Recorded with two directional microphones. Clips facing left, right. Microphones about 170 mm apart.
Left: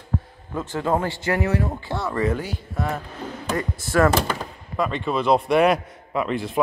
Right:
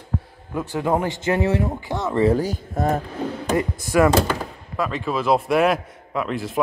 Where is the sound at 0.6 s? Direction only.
15° right (ahead or behind); by 3.0 s 45° right (ahead or behind).